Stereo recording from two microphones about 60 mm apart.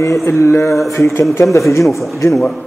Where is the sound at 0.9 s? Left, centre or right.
Left.